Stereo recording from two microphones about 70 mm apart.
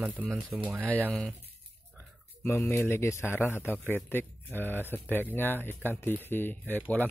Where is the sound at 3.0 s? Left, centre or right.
Left.